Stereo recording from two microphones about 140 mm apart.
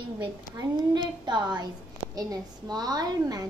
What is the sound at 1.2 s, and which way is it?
A woman's voice, 30° right (ahead or behind).